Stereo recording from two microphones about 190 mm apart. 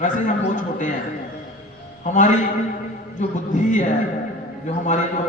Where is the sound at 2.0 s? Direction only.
40° left (ahead or behind).